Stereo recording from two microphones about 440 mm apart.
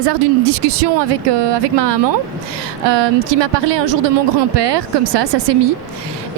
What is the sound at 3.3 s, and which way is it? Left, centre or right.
A woman's voice, right.